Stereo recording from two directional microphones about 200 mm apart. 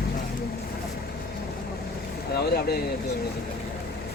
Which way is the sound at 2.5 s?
50° left (ahead or behind).